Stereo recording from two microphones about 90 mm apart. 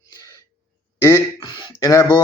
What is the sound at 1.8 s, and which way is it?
Speech, 35° left (ahead or behind).